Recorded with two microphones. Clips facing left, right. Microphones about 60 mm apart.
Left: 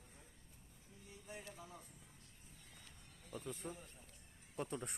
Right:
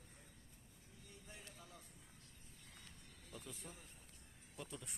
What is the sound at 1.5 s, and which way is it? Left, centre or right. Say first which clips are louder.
Music: left 5 dB; left.